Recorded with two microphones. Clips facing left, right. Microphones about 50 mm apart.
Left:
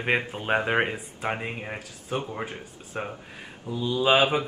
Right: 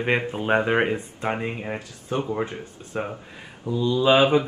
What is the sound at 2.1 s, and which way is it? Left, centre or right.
Speech, centre.